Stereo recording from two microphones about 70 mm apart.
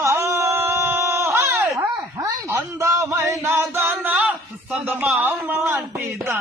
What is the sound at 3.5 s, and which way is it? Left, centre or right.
Singing, right.